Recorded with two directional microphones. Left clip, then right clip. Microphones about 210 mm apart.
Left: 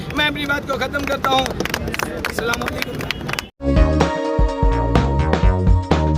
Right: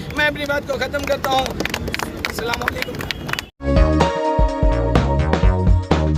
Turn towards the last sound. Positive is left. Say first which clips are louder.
# even
turn(degrees=0)  # may be behind; listen again after turning